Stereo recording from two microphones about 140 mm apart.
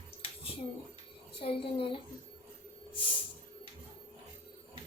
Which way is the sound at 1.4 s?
40° left (ahead or behind).